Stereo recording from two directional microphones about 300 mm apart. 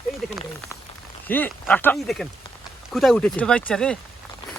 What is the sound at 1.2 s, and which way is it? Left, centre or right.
Speech, centre.